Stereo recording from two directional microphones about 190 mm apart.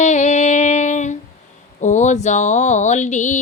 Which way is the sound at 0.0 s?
40° left (ahead or behind).